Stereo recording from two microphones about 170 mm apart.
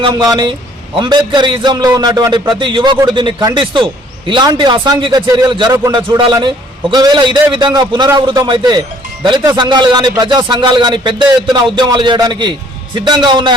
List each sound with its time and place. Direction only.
0.0 s a man's voice: 25° right (ahead or behind)